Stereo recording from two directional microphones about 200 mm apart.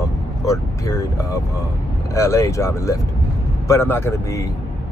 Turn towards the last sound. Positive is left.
turn(degrees=10)  # may be behind; listen again after turning